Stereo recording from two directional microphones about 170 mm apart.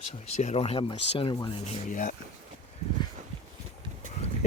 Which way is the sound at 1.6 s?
50° left (ahead or behind).